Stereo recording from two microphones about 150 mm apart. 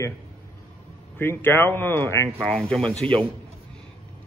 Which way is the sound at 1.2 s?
15° left (ahead or behind).